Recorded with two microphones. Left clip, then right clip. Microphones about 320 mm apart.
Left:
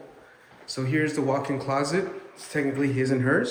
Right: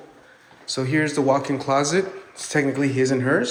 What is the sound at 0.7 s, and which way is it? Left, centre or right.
A man's voice, centre.